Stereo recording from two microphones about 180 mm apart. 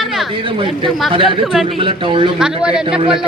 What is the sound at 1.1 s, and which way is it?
Speech, 30° right (ahead or behind).